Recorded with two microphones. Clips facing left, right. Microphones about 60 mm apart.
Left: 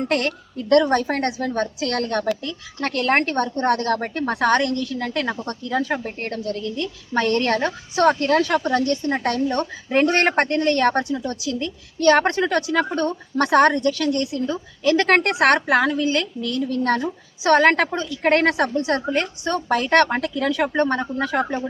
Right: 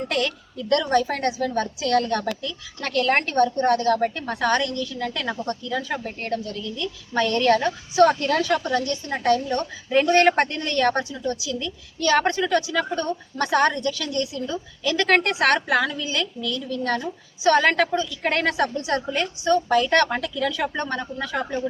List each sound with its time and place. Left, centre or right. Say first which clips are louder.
0.1 s a woman's voice: left 3 dB; left
11.3 s a woman's voice: left 1 dB; left
20.8 s speech: left 6 dB; left